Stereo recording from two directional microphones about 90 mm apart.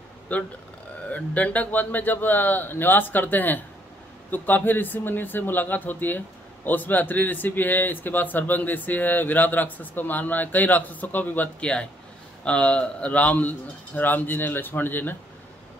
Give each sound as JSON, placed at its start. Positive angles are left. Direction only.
{"t": 0.3, "sound": "a man's voice", "side_deg": 15}